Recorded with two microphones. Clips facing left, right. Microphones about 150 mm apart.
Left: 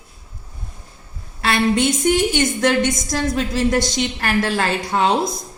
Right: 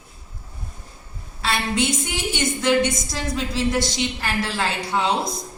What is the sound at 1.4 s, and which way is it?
A woman's voice, 55° left (ahead or behind).